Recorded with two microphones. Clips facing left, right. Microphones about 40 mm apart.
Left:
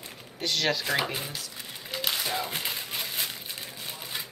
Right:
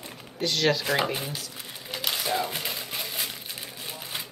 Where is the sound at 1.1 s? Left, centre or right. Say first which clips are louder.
Right 2 dB; centre.